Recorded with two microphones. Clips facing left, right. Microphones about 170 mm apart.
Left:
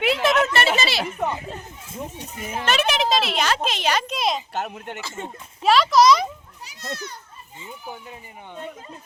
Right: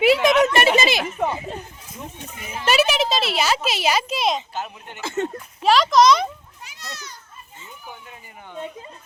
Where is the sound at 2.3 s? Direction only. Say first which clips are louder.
Left 5 dB; 45° left (ahead or behind).